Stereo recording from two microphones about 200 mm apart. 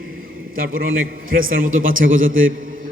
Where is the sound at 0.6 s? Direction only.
45° right (ahead or behind).